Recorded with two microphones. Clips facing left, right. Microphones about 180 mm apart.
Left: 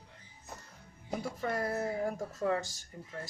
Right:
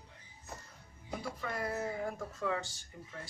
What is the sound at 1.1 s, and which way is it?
Speech, 40° left (ahead or behind).